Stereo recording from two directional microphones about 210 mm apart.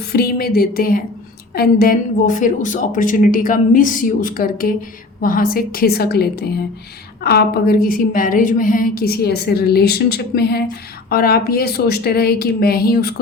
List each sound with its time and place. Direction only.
0.1 s a woman's voice: 50° left (ahead or behind)